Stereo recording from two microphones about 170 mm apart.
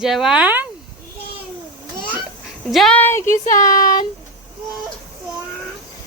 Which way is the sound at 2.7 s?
5° left (ahead or behind).